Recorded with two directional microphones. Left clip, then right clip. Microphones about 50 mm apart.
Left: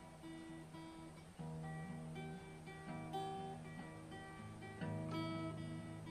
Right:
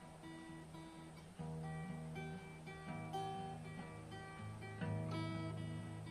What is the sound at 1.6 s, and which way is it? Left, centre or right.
Music, centre.